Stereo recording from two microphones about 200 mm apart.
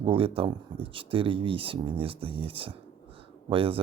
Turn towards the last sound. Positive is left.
turn(degrees=-25)  # may be behind; listen again after turning